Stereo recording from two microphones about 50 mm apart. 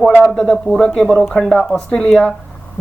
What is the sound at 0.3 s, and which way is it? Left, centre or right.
Speech, centre.